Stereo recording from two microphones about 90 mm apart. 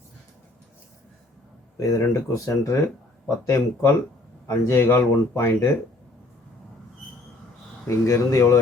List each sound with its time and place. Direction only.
1.8 s speech: 35° left (ahead or behind)
7.9 s speech: 35° left (ahead or behind)